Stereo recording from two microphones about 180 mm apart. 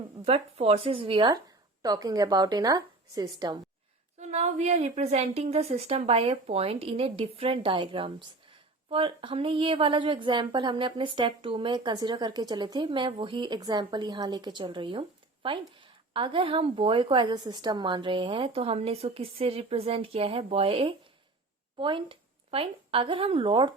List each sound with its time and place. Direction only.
0.3 s a woman's voice: 35° right (ahead or behind)
4.2 s a woman's voice: 40° right (ahead or behind)